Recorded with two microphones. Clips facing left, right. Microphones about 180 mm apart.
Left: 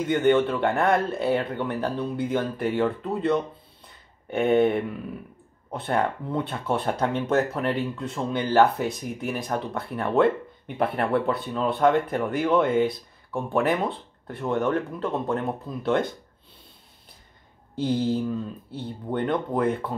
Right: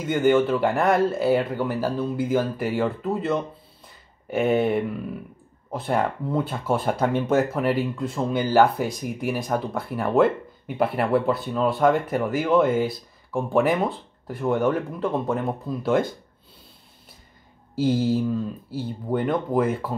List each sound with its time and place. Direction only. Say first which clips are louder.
0.0 s speech: right 1 dB; 5° right (ahead or behind)
17.7 s speech: right 3 dB; 5° right (ahead or behind)